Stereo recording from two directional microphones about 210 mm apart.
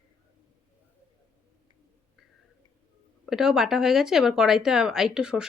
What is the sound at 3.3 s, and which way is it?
Speech, centre (ahead or behind).